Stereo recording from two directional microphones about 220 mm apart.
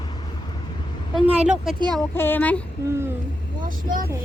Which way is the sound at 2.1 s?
10° left (ahead or behind).